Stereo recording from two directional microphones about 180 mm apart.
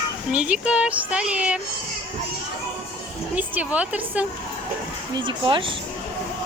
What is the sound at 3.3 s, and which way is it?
Speech, 10° right (ahead or behind).